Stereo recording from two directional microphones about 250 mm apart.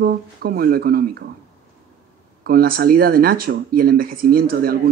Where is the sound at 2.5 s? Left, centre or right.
Right.